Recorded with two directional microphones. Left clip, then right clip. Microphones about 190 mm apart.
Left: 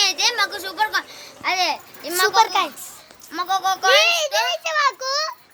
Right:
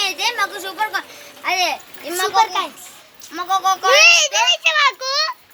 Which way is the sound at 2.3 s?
65° left (ahead or behind).